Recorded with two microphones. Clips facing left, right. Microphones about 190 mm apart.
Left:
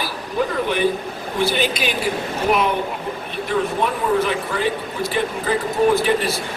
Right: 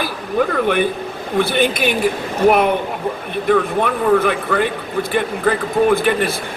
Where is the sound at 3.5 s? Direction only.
55° right (ahead or behind).